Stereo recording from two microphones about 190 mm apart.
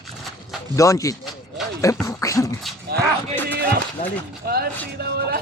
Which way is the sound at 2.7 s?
Centre (ahead or behind).